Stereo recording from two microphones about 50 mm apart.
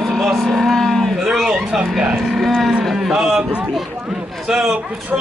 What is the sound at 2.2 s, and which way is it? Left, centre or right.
Cattle, centre.